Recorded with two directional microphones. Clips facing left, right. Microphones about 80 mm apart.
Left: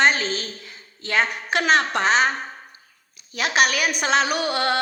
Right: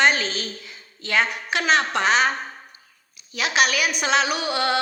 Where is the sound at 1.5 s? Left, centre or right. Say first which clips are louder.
Left 2 dB; left.